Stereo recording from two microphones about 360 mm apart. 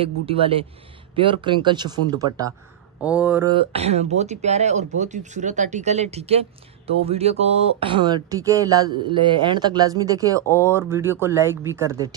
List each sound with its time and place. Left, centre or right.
0.0 s speech: centre